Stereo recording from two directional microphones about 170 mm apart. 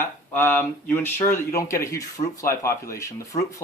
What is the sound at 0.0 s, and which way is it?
Speech, 15° left (ahead or behind).